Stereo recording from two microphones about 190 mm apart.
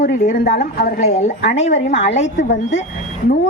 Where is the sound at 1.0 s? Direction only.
35° left (ahead or behind).